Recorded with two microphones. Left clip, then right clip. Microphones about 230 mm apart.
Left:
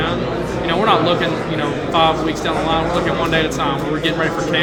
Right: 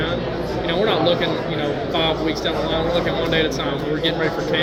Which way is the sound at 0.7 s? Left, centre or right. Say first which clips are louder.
Left 4 dB; centre.